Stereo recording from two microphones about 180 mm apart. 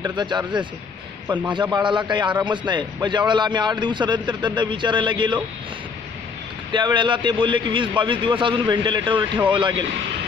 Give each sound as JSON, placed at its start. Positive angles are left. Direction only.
{"t": 0.0, "sound": "a man's voice", "side_deg": -25}
{"t": 6.7, "sound": "a man's voice", "side_deg": -25}